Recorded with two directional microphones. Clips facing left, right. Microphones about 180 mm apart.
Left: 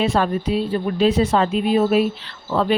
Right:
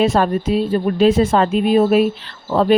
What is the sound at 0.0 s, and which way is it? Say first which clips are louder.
Speech: right 4 dB; 45° right (ahead or behind).